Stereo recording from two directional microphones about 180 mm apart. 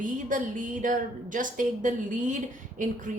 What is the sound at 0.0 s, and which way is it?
A woman's voice, 45° right (ahead or behind).